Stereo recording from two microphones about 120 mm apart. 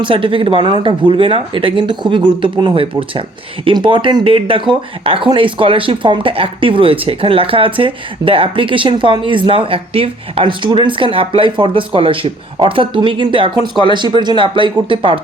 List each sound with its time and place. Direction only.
0.0 s speech: 45° right (ahead or behind)